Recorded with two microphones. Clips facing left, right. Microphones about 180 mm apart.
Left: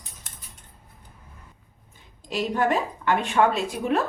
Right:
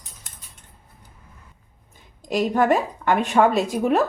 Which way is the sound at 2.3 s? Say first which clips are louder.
Right 5 dB; 45° right (ahead or behind).